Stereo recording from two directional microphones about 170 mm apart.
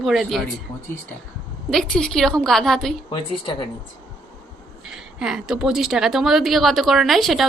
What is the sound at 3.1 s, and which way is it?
Speech, 30° left (ahead or behind).